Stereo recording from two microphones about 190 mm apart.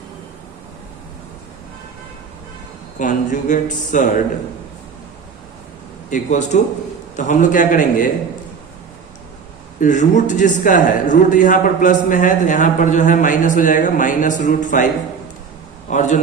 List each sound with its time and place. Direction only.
3.0 s a man's voice: 40° left (ahead or behind)
6.1 s a man's voice: 40° left (ahead or behind)
9.8 s a man's voice: 40° left (ahead or behind)
15.9 s speech: 40° left (ahead or behind)